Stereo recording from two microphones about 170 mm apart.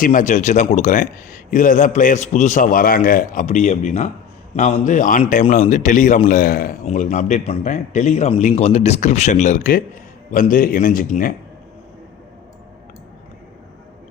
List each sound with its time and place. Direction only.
0.0 s a man's voice: 50° left (ahead or behind)
6.8 s a man's voice: 50° left (ahead or behind)